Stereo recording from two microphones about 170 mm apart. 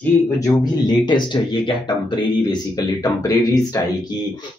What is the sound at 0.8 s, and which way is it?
Speech, 25° left (ahead or behind).